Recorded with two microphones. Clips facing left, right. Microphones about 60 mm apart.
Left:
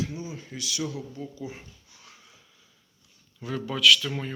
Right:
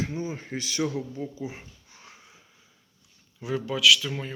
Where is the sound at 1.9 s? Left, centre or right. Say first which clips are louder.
Right 2 dB; right.